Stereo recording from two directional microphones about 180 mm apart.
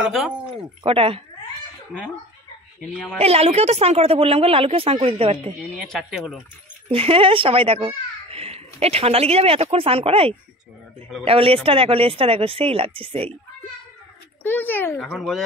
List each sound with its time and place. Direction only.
0.0 s speech: centre (ahead or behind)
0.8 s a child's voice: 30° right (ahead or behind)
3.2 s a child's voice: 35° right (ahead or behind)
5.6 s speech: centre (ahead or behind)
6.9 s a child's voice: 30° right (ahead or behind)
14.4 s speech: 10° left (ahead or behind)